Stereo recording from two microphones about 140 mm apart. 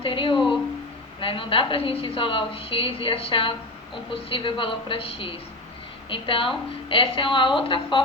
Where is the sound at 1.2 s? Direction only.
40° left (ahead or behind).